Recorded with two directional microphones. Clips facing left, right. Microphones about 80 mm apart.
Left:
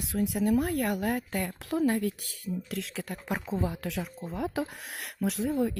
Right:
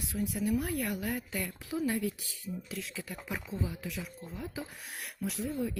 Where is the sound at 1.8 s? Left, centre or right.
Left.